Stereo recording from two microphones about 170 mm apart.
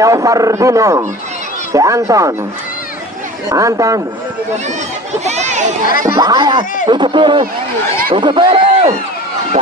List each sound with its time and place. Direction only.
0.0 s speech: 20° right (ahead or behind)
3.4 s speech: 20° right (ahead or behind)
5.2 s speech: 40° right (ahead or behind)
6.0 s speech: 20° right (ahead or behind)